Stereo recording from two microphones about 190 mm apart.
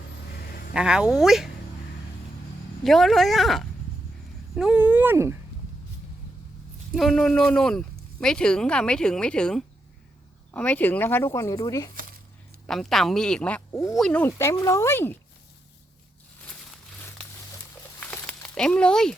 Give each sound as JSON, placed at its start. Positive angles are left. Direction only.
{"t": 0.3, "sound": "a sound", "side_deg": 55}
{"t": 0.7, "sound": "speech", "side_deg": -5}
{"t": 2.8, "sound": "speech", "side_deg": 0}
{"t": 6.9, "sound": "speech", "side_deg": 0}
{"t": 12.6, "sound": "speech", "side_deg": 0}
{"t": 16.5, "sound": "a sound", "side_deg": 5}